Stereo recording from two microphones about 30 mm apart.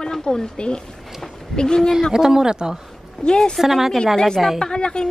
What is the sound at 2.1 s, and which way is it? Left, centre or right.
Speech, right.